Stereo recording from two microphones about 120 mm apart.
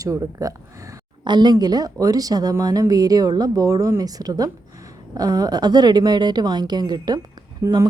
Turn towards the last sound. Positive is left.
turn(degrees=-25)  # may be behind; listen again after turning